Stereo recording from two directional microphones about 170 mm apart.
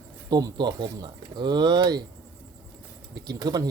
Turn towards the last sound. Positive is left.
turn(degrees=-25)  # may be behind; listen again after turning